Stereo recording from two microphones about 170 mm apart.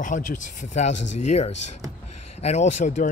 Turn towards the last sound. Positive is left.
turn(degrees=45)  # may be behind; listen again after turning